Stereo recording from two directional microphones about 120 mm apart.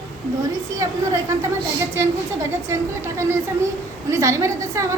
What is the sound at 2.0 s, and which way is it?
Speech, 25° right (ahead or behind).